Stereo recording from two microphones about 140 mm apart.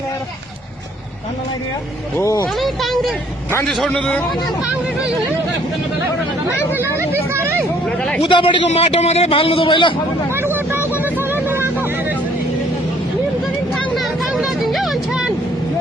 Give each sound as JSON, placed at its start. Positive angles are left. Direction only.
{"t": 2.1, "sound": "speech", "side_deg": 20}
{"t": 2.6, "sound": "a sound", "side_deg": 0}
{"t": 3.7, "sound": "a man's voice", "side_deg": 0}
{"t": 6.7, "sound": "speech", "side_deg": -15}
{"t": 7.9, "sound": "a man's voice", "side_deg": 5}
{"t": 8.2, "sound": "a man's voice", "side_deg": 35}
{"t": 10.3, "sound": "vehicle", "side_deg": -15}
{"t": 13.7, "sound": "a sound", "side_deg": 0}
{"t": 14.3, "sound": "music", "side_deg": 0}